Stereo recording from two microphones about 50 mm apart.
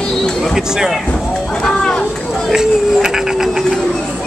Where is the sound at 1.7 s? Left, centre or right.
Centre.